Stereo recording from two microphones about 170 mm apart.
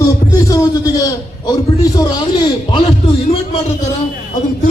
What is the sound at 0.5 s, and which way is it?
A man's voice, 20° left (ahead or behind).